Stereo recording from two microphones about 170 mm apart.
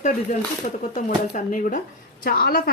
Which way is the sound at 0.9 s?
50° left (ahead or behind).